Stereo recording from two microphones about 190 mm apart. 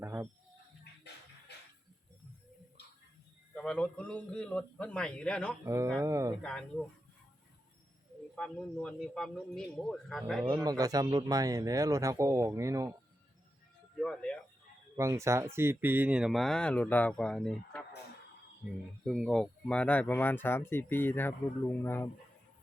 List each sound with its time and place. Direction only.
0.0 s music: 15° right (ahead or behind)
3.5 s speech: 5° left (ahead or behind)
5.6 s speech: 15° right (ahead or behind)
6.4 s speech: 5° left (ahead or behind)
8.4 s speech: 5° left (ahead or behind)
10.5 s speech: 20° right (ahead or behind)
14.0 s speech: 5° left (ahead or behind)
14.9 s speech: 15° right (ahead or behind); by 17.8 s 5° left (ahead or behind)
19.0 s speech: centre (ahead or behind)